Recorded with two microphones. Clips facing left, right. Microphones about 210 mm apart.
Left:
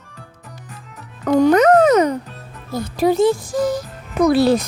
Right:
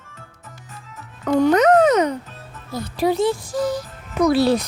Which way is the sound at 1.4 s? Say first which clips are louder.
Left 2 dB; 45° left (ahead or behind).